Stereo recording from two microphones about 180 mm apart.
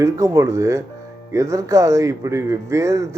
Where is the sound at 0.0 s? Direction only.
15° right (ahead or behind).